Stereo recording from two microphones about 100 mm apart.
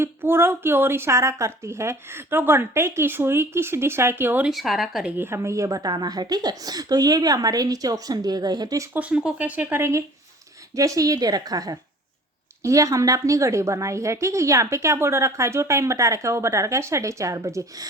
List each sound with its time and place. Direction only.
0.0 s a woman's voice: 20° right (ahead or behind)
4.4 s a woman's voice: centre (ahead or behind)
5.1 s a woman's voice: 25° right (ahead or behind)
8.9 s a woman's voice: 15° right (ahead or behind); by 17.8 s 35° right (ahead or behind)